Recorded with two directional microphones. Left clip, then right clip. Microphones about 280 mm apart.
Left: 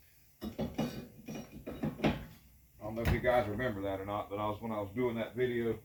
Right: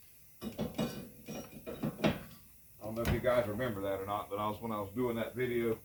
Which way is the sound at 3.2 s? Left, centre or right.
Centre.